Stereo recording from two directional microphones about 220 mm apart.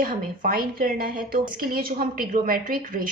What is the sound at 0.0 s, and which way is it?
A woman's voice, 40° right (ahead or behind).